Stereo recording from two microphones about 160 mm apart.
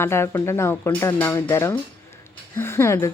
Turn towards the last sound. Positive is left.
turn(degrees=15)  # may be behind; listen again after turning